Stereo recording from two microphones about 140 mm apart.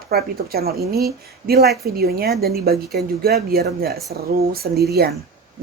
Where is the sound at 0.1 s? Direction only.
90° right.